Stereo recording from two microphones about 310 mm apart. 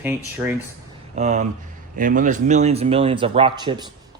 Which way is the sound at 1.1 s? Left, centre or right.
Right.